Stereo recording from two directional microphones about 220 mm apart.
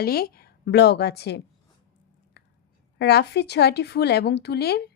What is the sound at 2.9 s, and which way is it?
Speech, 50° left (ahead or behind).